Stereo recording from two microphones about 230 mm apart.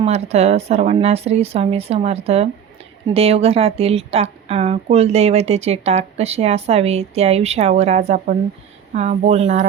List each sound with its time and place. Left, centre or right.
0.0 s a woman's voice: right